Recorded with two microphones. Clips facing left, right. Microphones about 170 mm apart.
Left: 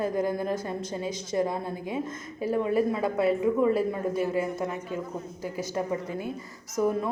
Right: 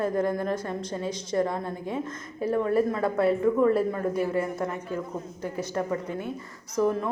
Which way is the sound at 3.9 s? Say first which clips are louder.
Right 1 dB; 15° left (ahead or behind).